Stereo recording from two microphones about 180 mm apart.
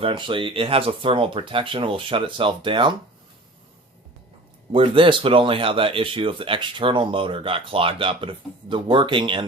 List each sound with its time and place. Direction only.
0.0 s speech: 30° right (ahead or behind)
4.7 s speech: 30° right (ahead or behind)